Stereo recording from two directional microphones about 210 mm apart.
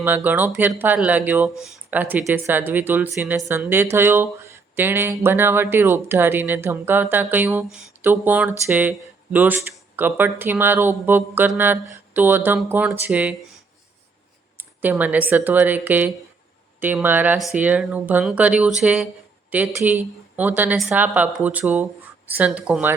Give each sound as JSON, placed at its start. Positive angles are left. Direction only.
{"t": 0.0, "sound": "speech", "side_deg": -10}
{"t": 14.6, "sound": "speech", "side_deg": -10}